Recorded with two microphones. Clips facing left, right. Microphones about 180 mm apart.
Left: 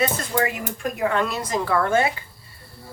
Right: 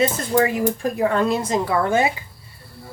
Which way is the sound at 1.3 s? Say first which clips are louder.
Right 2 dB; 20° right (ahead or behind).